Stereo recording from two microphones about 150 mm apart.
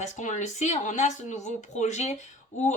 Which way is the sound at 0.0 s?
55° left (ahead or behind).